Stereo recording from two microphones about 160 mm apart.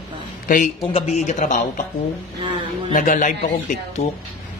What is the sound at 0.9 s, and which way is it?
Speech, 45° left (ahead or behind).